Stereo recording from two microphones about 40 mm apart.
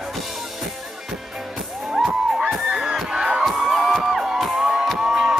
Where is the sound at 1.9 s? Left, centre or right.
Centre.